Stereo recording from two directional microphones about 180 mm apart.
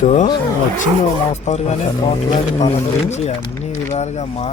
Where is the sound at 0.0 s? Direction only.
40° left (ahead or behind).